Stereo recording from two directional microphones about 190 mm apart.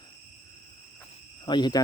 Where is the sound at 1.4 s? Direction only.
25° left (ahead or behind).